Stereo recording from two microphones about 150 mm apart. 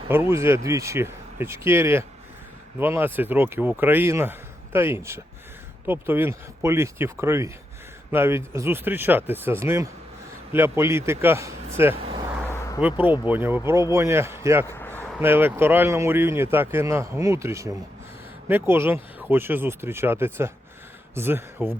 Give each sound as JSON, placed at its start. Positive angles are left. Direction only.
{"t": 0.1, "sound": "speech", "side_deg": -15}
{"t": 11.9, "sound": "vehicle", "side_deg": -35}
{"t": 12.5, "sound": "a sound", "side_deg": 20}
{"t": 12.8, "sound": "speech", "side_deg": -10}
{"t": 14.7, "sound": "a sound", "side_deg": 15}
{"t": 15.2, "sound": "speech", "side_deg": -15}